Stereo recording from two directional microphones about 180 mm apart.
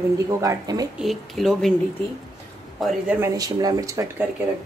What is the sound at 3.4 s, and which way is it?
Speech, 20° right (ahead or behind).